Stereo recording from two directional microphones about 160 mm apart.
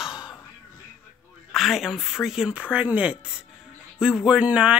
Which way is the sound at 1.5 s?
Centre (ahead or behind).